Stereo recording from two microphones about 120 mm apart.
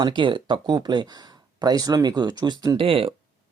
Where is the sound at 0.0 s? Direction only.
40° right (ahead or behind).